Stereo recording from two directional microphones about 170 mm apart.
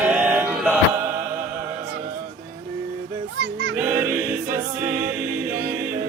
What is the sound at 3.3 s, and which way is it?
Music, 75° right (ahead or behind).